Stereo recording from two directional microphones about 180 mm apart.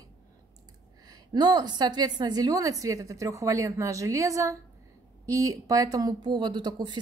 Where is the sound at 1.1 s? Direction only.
20° right (ahead or behind).